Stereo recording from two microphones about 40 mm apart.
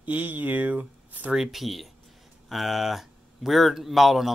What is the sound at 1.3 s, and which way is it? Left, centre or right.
Speech, centre.